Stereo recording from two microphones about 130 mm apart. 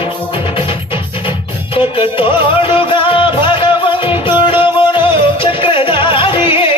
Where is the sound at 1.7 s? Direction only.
45° left (ahead or behind).